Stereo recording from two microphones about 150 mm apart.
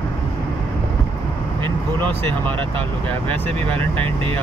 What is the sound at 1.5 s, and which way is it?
Vehicle, 30° right (ahead or behind).